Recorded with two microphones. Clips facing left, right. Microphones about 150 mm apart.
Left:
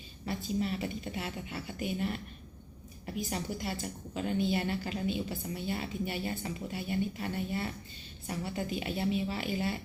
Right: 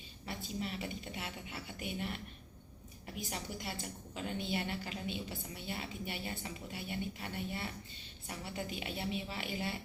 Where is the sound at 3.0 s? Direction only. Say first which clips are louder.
Left 7 dB; 25° left (ahead or behind).